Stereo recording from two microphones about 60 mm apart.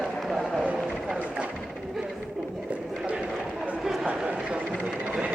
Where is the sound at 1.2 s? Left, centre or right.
Right.